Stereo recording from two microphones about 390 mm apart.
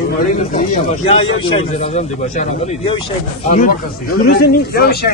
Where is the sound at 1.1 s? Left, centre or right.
Centre.